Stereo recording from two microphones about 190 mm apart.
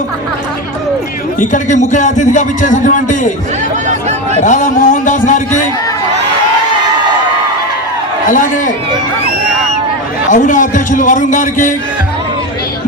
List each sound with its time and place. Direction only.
1.4 s a man's voice: 40° left (ahead or behind)
4.4 s a man's voice: 40° left (ahead or behind)
8.3 s a man's voice: 45° left (ahead or behind)
10.2 s a man's voice: 40° left (ahead or behind)